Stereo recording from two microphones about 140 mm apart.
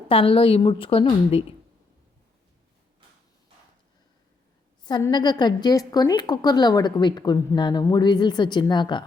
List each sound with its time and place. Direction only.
0.1 s a woman's voice: 40° left (ahead or behind)
4.8 s a sound: 30° left (ahead or behind)
5.1 s a woman's voice: 30° left (ahead or behind)